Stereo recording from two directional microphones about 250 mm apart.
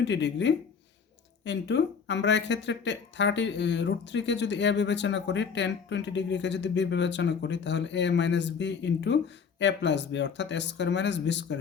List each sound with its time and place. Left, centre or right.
0.0 s speech: left